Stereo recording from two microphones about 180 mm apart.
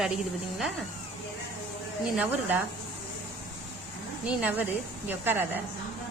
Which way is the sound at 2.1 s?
10° right (ahead or behind).